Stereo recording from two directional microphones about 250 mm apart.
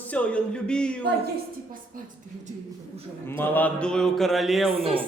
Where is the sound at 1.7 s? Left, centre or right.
Right.